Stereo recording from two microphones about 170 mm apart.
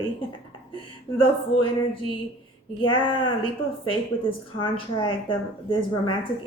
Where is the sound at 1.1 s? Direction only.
30° left (ahead or behind).